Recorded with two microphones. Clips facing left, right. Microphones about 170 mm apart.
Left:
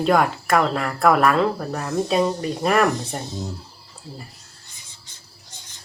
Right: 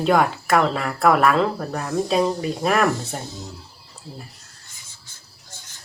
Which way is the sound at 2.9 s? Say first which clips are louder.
Even; 15° left (ahead or behind).